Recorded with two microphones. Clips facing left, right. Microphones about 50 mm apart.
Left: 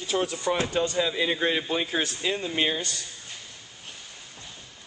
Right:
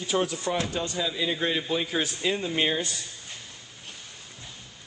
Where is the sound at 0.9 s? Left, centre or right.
Left.